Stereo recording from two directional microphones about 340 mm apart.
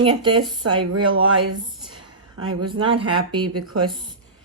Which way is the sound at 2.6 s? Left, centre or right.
Centre.